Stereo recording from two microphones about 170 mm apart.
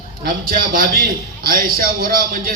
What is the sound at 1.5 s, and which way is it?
A man's voice, 60° right (ahead or behind).